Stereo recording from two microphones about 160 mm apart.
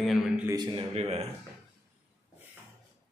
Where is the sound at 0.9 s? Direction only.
40° right (ahead or behind).